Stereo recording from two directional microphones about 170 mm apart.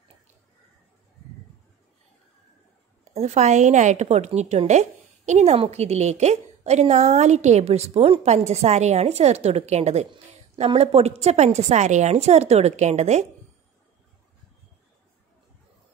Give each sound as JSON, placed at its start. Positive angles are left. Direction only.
{"t": 3.1, "sound": "a woman's voice", "side_deg": -40}